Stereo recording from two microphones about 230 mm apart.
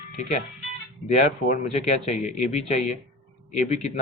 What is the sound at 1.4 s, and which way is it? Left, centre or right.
Speech, left.